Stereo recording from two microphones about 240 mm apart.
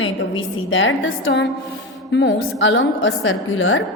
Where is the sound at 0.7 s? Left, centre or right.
Left.